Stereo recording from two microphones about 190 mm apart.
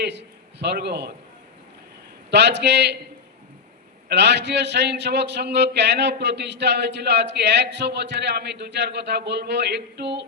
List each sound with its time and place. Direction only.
0.0 s a man's voice: 65° right (ahead or behind)
2.3 s a man's voice: 65° right (ahead or behind)
4.1 s a man's voice: 65° right (ahead or behind)